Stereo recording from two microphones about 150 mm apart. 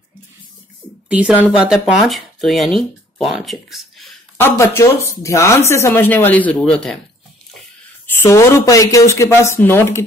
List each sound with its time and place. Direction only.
1.0 s speech: 10° right (ahead or behind)
4.4 s speech: 15° left (ahead or behind)
8.2 s speech: 20° left (ahead or behind)